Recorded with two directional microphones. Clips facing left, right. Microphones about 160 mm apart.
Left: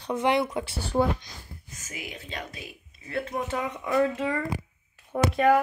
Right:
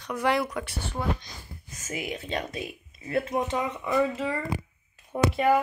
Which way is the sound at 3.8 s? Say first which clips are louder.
Left 2 dB; 5° right (ahead or behind).